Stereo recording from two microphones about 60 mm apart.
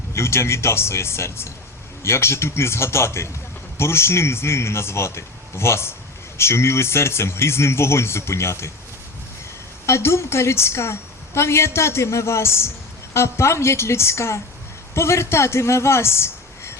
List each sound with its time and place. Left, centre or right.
0.1 s speech: left
9.8 s a man's voice: left